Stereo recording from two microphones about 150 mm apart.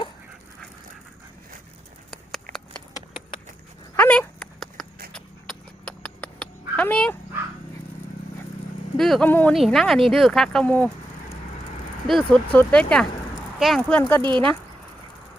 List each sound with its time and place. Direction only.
2.0 s a sound: centre (ahead or behind)
3.9 s a sound: 10° left (ahead or behind)
5.1 s cat: 5° left (ahead or behind)
9.0 s vehicle: centre (ahead or behind)
9.5 s speech: centre (ahead or behind)
12.0 s speech: 5° left (ahead or behind)
14.2 s speech: 30° right (ahead or behind)